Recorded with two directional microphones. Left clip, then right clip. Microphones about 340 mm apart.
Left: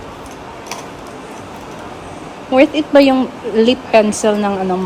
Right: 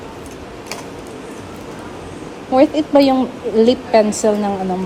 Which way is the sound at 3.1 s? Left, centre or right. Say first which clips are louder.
Left 1 dB; left.